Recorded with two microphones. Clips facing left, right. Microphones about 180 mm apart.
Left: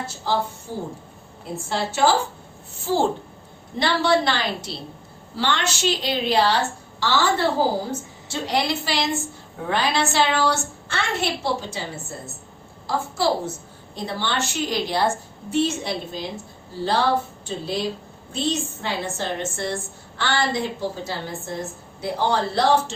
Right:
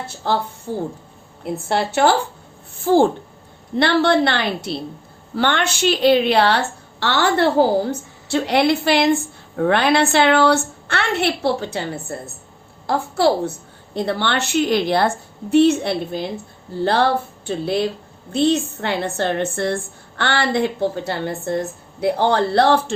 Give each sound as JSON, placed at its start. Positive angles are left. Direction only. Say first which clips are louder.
{"t": 0.2, "sound": "a woman's voice", "louder": "right 3 dB", "side_deg": -60}